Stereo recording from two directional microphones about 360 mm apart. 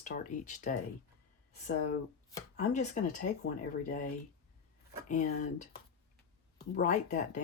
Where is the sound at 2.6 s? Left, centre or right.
Centre.